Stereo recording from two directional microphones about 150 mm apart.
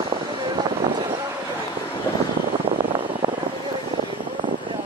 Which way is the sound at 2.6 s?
35° right (ahead or behind).